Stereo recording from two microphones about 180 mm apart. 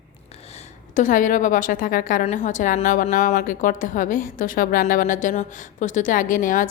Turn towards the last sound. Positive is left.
turn(degrees=50)  # may be behind; listen again after turning